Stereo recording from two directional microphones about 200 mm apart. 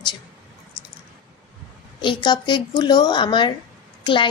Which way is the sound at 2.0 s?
25° left (ahead or behind).